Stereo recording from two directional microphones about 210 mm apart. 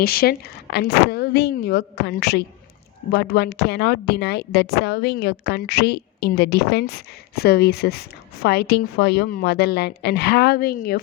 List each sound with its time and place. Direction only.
0.0 s a woman's voice: 45° left (ahead or behind)